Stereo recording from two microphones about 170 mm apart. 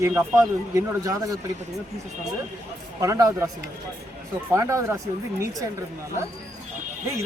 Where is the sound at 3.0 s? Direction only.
20° right (ahead or behind).